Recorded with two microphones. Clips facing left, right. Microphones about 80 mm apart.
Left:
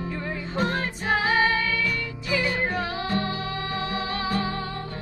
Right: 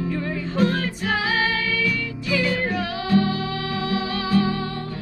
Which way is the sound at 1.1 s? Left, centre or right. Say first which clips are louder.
Left 2 dB; left.